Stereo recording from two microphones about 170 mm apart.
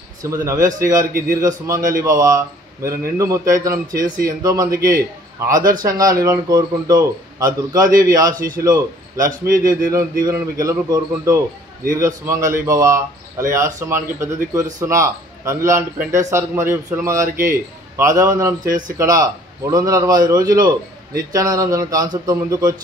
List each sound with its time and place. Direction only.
0.2 s a man's voice: 15° right (ahead or behind)